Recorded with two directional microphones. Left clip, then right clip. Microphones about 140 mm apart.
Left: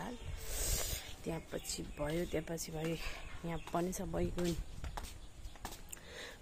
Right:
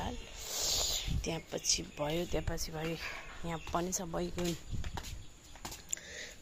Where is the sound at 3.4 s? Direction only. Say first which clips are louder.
Right 2 dB; 10° left (ahead or behind).